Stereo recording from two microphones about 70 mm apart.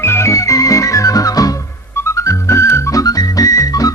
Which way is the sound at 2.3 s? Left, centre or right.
Left.